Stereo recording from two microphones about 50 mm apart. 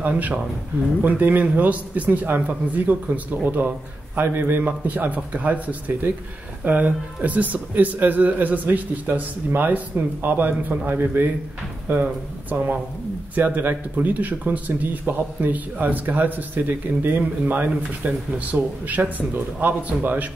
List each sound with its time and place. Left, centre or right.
0.0 s a man's voice: right